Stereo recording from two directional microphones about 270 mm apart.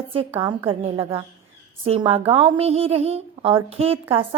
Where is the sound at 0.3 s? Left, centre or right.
Centre.